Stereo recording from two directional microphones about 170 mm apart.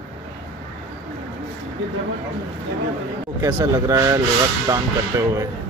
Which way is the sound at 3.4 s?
15° right (ahead or behind).